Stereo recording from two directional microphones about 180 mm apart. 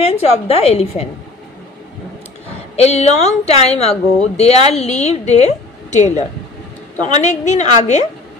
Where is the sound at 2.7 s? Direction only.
35° left (ahead or behind).